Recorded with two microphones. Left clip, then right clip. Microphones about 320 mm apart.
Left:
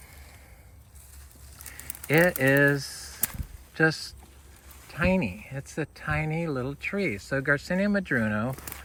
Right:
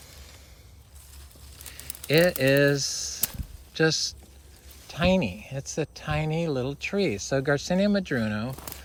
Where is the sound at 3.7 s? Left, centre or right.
Centre.